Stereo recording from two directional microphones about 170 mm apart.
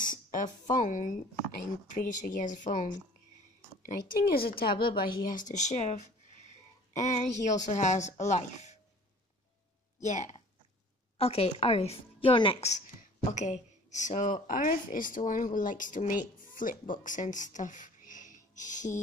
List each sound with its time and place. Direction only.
0.0 s speech: 50° left (ahead or behind)
3.8 s speech: 60° left (ahead or behind)
5.5 s speech: 40° left (ahead or behind)
10.0 s a woman's voice: 45° left (ahead or behind)
13.3 s speech: 45° left (ahead or behind)